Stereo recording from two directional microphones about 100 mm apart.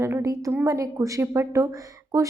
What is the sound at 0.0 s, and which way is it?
A woman's voice, 30° right (ahead or behind).